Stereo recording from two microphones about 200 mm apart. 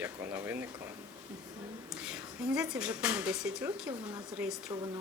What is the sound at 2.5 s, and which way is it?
Speech, 5° right (ahead or behind).